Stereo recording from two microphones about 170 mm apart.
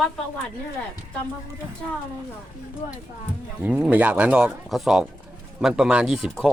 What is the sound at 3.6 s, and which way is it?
Speech, 10° right (ahead or behind).